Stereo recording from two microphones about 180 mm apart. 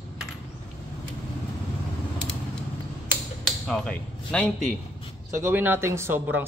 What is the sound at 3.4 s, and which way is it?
Speech, 5° left (ahead or behind).